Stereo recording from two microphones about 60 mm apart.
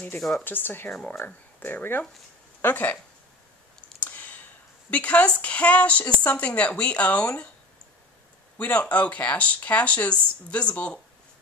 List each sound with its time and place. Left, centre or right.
0.4 s speech: left
4.0 s clicking: left
4.9 s a woman's voice: left
8.5 s a woman's voice: left